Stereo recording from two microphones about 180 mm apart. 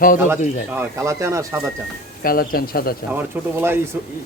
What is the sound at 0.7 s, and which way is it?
Speech, 15° right (ahead or behind).